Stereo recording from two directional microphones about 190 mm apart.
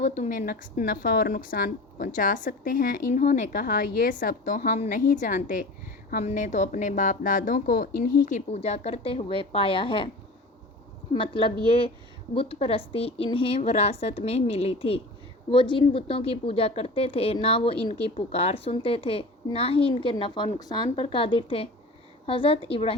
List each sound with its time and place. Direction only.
0.0 s a woman's voice: 40° left (ahead or behind)
11.1 s a woman's voice: 25° left (ahead or behind)